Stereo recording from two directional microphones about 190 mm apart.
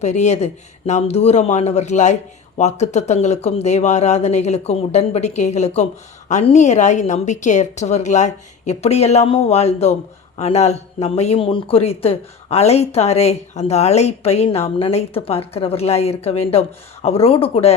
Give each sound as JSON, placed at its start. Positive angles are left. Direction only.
{"t": 0.0, "sound": "a man's voice", "side_deg": 35}